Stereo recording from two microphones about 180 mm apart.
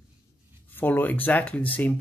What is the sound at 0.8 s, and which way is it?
Speech, 10° left (ahead or behind).